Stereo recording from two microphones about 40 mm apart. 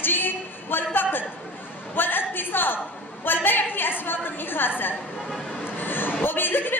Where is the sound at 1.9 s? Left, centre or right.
Left.